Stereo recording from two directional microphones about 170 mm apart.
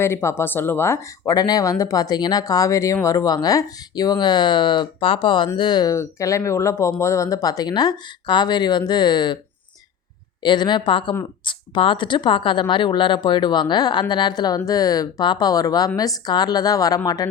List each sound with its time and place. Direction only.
0.0 s speech: 15° left (ahead or behind)
10.4 s speech: 25° left (ahead or behind)